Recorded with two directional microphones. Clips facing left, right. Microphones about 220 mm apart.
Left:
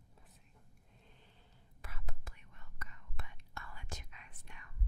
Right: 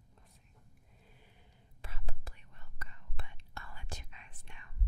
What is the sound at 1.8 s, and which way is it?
Whispering, 30° right (ahead or behind).